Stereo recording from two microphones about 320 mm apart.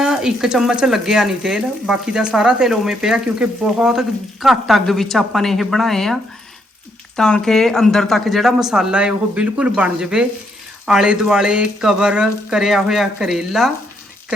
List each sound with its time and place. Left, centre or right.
0.0 s speech: centre
7.2 s speech: centre